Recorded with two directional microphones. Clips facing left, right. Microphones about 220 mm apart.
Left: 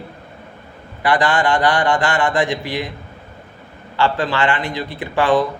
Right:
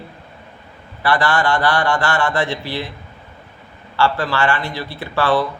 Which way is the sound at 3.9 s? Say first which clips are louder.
Even; 15° left (ahead or behind).